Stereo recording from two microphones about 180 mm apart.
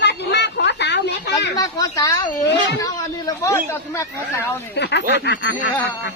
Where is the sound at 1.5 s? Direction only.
20° left (ahead or behind).